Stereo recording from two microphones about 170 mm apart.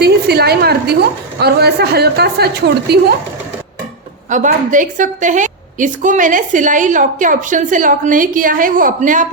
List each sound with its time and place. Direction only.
0.0 s a sound: 70° right (ahead or behind)
1.4 s a woman's voice: 70° right (ahead or behind)
4.3 s a woman's voice: 45° right (ahead or behind)